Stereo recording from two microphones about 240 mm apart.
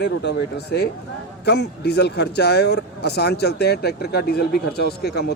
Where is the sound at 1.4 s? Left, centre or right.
Left.